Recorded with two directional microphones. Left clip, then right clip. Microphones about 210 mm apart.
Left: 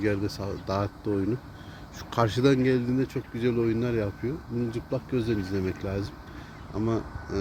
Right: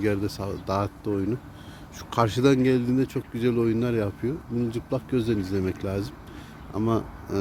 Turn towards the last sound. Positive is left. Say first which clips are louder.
# right 3 dB
turn(degrees=-20)  # may be behind; listen again after turning